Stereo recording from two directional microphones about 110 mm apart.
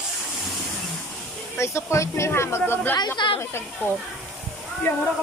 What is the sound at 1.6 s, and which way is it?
A child's voice, 25° left (ahead or behind).